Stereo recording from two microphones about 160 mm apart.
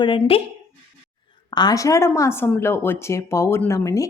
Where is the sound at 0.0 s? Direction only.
30° left (ahead or behind).